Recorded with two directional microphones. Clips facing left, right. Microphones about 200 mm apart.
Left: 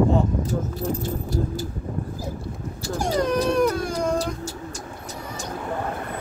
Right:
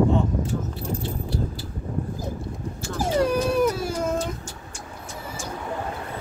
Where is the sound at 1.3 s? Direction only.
45° left (ahead or behind).